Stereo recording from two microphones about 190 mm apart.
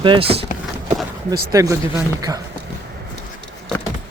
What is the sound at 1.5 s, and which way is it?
Speech, 15° right (ahead or behind).